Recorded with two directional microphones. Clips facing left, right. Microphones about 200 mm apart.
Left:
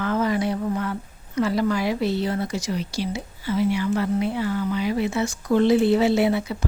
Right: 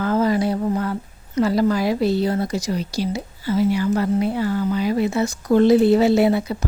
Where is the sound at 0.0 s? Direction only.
35° right (ahead or behind).